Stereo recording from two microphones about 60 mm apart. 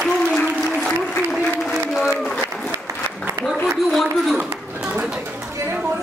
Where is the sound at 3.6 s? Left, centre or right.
Centre.